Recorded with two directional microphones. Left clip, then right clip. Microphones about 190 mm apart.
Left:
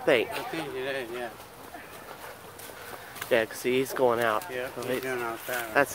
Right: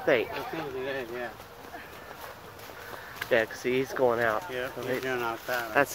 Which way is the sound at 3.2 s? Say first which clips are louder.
Even; 15° left (ahead or behind).